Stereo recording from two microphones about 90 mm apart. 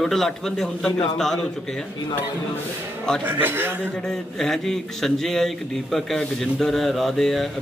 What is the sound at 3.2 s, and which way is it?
Speech, 25° right (ahead or behind).